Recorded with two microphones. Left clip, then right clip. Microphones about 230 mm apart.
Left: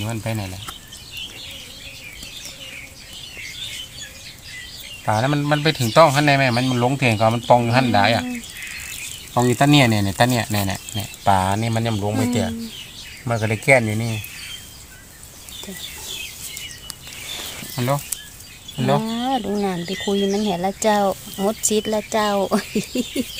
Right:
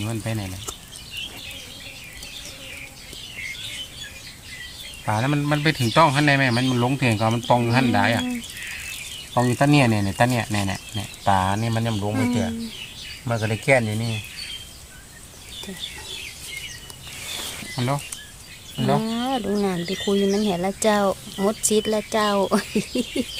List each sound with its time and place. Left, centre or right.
0.0 s speech: left
5.0 s speech: left
9.3 s speech: left
17.7 s speech: left
19.0 s speech: centre